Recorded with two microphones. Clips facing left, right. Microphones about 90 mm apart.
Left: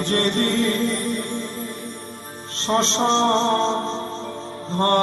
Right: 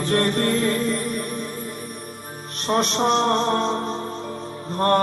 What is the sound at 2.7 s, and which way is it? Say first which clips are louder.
Music: left 1 dB; 25° left (ahead or behind).